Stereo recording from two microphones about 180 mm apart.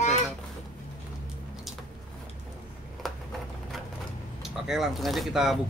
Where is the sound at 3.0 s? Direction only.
Centre (ahead or behind).